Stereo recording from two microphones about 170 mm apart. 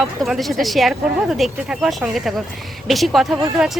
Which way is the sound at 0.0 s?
Centre (ahead or behind).